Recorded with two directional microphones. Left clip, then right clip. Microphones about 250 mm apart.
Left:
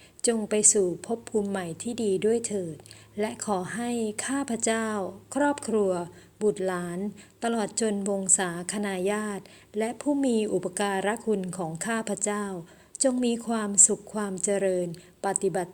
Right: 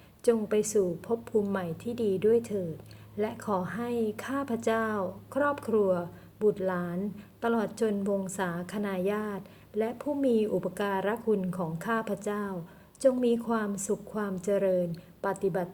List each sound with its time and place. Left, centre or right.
0.2 s a woman's voice: left